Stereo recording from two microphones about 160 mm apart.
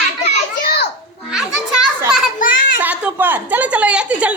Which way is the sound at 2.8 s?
10° right (ahead or behind).